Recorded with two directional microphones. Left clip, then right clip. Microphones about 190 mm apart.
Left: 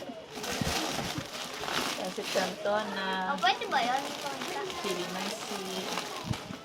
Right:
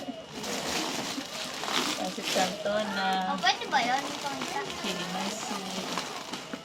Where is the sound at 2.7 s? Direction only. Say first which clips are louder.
Right 3 dB; 15° left (ahead or behind).